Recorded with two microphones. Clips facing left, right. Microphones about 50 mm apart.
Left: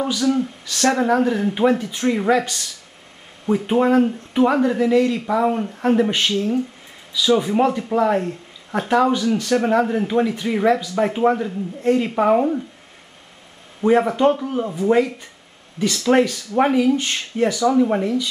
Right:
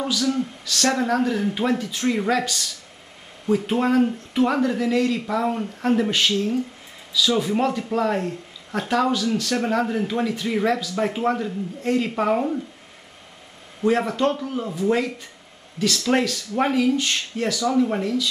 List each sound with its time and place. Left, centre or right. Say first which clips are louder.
0.0 s speech: left 4 dB; centre
13.8 s speech: left 5 dB; centre